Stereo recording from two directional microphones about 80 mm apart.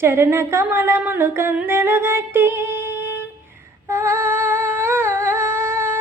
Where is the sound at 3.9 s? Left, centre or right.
Right.